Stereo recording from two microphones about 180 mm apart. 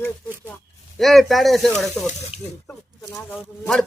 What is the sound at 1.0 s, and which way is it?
Speech, centre (ahead or behind).